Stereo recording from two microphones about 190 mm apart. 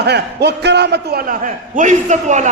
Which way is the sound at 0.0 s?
60° right (ahead or behind).